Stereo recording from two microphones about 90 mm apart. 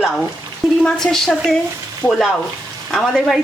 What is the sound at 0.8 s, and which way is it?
Speech, 5° left (ahead or behind).